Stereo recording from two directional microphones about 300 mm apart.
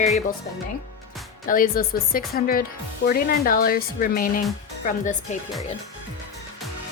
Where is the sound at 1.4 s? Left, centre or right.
Left.